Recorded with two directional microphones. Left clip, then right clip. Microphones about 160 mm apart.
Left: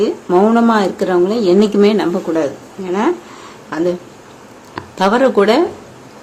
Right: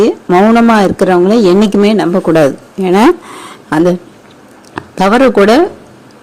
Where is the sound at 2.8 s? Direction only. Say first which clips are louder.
Right 9 dB; 60° right (ahead or behind).